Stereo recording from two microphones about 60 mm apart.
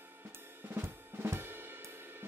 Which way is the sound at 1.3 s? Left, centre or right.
Right.